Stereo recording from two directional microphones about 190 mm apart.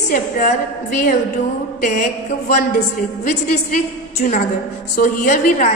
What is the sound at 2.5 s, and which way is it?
A woman's voice, 40° left (ahead or behind).